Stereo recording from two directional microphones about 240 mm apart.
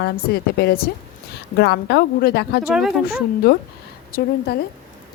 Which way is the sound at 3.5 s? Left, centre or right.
Left.